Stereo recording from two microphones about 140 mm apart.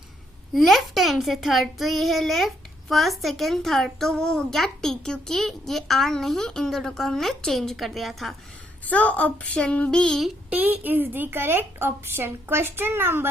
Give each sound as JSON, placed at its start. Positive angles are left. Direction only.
{"t": 0.5, "sound": "a child's voice", "side_deg": 0}
{"t": 8.9, "sound": "child singing", "side_deg": 10}